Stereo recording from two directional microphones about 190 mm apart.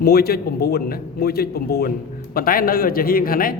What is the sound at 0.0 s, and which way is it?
A man's voice, 55° left (ahead or behind).